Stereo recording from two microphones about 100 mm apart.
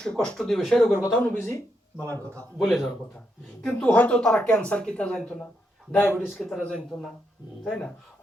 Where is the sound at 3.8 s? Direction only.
15° left (ahead or behind).